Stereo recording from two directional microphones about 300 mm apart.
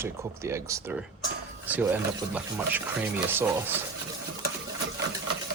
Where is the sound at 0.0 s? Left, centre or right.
Centre.